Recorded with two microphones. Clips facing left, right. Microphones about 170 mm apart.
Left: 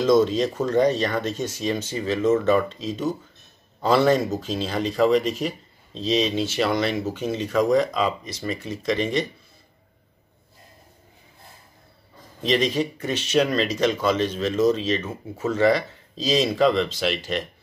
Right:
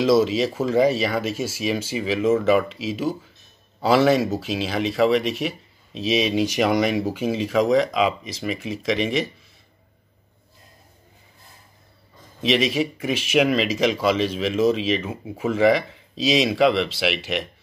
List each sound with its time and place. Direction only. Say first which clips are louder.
0.0 s speech: even; 5° right (ahead or behind)
8.8 s speech: right 1 dB; 90° right
12.5 s speech: left 1 dB; 5° right (ahead or behind)
14.1 s speech: right 1 dB; 90° right
14.4 s speech: even; 10° right (ahead or behind)
15.9 s speech: right 2 dB; 90° right
16.4 s speech: right 1 dB; 5° right (ahead or behind)